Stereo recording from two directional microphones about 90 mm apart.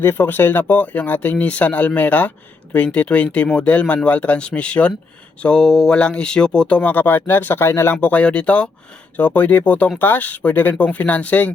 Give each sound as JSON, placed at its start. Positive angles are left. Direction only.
{"t": 0.0, "sound": "speech", "side_deg": 25}
{"t": 8.0, "sound": "speech", "side_deg": 15}